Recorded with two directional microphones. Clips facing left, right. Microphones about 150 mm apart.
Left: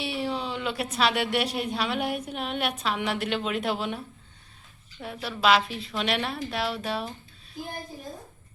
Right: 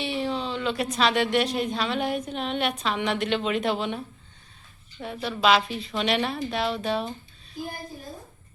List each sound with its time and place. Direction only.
0.0 s a woman's voice: 10° left (ahead or behind)